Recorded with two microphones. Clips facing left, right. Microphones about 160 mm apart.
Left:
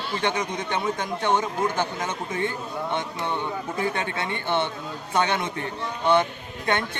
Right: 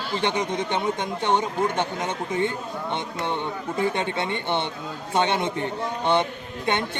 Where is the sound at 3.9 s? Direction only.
20° right (ahead or behind).